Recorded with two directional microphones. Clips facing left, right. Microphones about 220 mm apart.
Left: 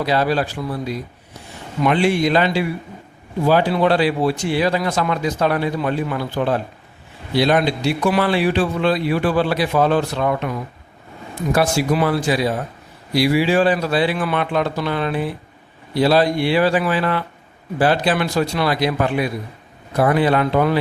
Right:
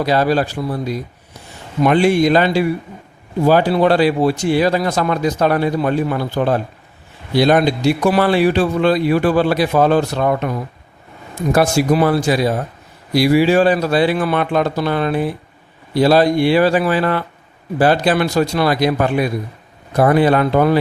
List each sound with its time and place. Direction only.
0.0 s speech: 45° right (ahead or behind)
11.5 s speech: 40° right (ahead or behind)